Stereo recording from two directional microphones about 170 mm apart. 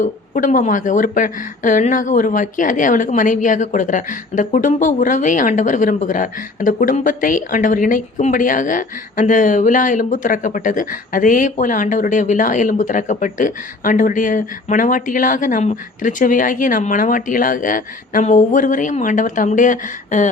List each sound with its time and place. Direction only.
0.0 s a woman's voice: 50° left (ahead or behind)